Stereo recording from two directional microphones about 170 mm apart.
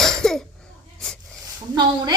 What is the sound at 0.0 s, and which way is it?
Cough, 5° left (ahead or behind).